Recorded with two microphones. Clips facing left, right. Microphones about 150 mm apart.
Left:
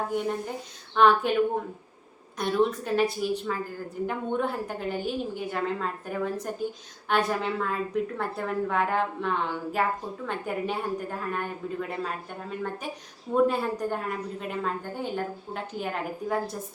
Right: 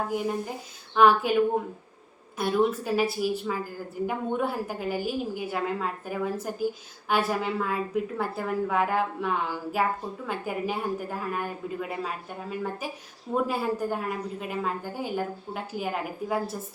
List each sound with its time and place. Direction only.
0.1 s a woman's voice: 5° right (ahead or behind)
2.4 s a woman's voice: 5° right (ahead or behind)